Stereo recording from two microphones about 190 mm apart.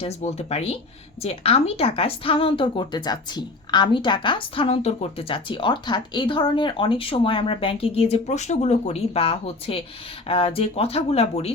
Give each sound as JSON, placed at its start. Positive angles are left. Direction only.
{"t": 0.0, "sound": "a woman's voice", "side_deg": 35}